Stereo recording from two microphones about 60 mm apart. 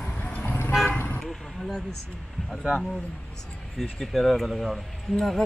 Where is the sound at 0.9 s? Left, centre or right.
Left.